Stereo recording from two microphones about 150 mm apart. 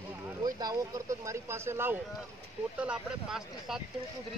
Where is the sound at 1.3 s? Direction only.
15° right (ahead or behind).